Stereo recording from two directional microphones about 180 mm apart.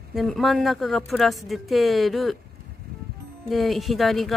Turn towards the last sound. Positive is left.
turn(degrees=0)  # may be behind; listen again after turning